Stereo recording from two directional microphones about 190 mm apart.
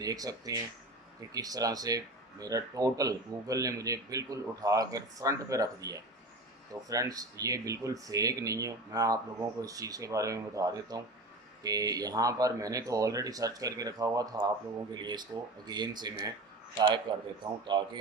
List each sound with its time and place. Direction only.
0.0 s speech: 20° right (ahead or behind)